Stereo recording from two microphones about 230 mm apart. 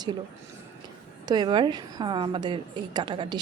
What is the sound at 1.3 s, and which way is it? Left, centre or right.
A woman's voice, centre.